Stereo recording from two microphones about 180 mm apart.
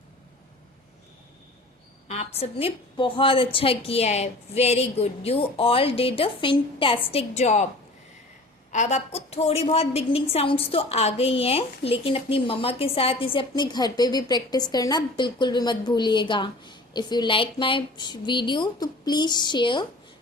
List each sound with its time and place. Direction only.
2.0 s a woman's voice: 35° left (ahead or behind)
8.7 s a woman's voice: 40° left (ahead or behind)